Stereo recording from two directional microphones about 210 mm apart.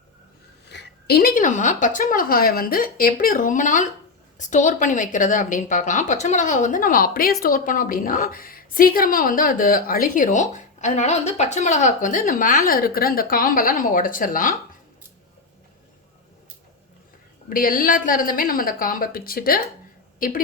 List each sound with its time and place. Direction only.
0.7 s a woman's voice: 50° left (ahead or behind)
17.5 s a woman's voice: 40° left (ahead or behind)